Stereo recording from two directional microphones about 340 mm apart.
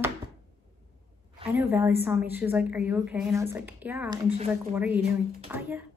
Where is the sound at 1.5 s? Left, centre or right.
Centre.